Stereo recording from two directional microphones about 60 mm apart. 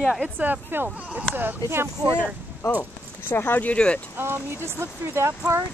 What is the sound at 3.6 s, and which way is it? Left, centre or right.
Speech, centre.